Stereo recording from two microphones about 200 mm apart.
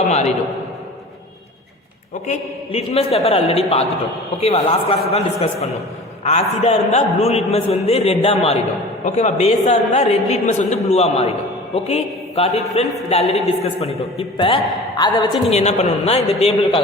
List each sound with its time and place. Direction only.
2.2 s a man's voice: 35° left (ahead or behind)